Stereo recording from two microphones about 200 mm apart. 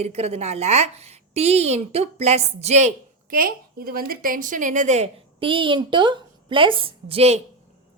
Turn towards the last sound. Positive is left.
turn(degrees=-30)  # may be behind; listen again after turning